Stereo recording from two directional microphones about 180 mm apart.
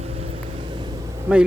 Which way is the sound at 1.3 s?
10° right (ahead or behind).